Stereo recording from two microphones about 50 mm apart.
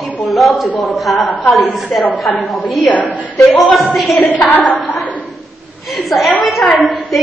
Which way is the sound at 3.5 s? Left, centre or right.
Centre.